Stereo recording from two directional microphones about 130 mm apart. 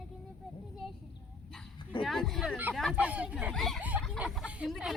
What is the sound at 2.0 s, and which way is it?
Speech, centre (ahead or behind).